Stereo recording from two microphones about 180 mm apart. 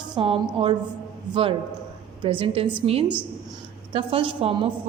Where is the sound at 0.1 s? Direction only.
25° right (ahead or behind).